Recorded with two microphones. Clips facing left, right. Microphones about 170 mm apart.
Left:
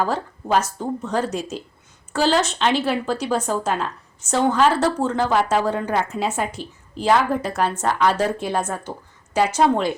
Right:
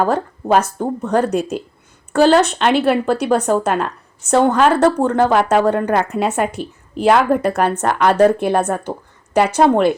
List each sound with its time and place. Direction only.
0.0 s speech: 55° right (ahead or behind)